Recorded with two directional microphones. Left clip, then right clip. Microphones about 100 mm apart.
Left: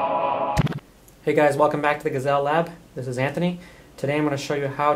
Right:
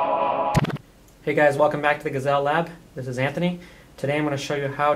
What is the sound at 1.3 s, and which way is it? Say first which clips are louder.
Speech: even; 40° left (ahead or behind).